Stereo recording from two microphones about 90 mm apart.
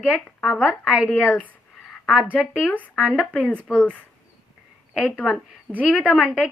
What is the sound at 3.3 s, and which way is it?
Speech, 15° left (ahead or behind).